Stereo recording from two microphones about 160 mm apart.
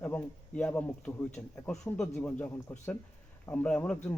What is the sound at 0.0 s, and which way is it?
Speech, 10° left (ahead or behind).